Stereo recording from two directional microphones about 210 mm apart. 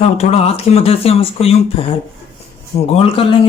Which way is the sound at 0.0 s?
30° left (ahead or behind).